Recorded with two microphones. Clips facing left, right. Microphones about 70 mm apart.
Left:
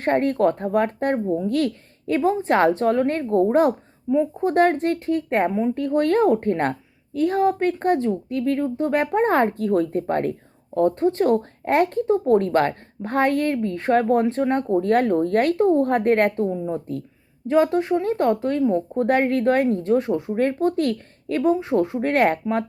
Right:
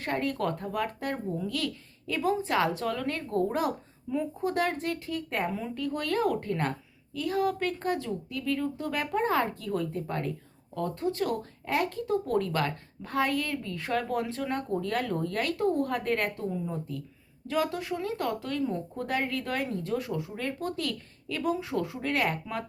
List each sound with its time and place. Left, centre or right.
0.0 s a woman's voice: left
4.1 s speech: left
4.4 s speech: left
5.5 s speech: left
5.7 s speech: left
19.0 s speech: left